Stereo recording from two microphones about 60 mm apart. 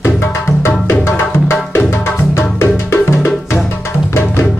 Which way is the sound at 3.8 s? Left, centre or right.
Left.